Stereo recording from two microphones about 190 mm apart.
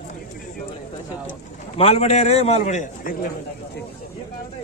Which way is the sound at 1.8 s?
35° left (ahead or behind).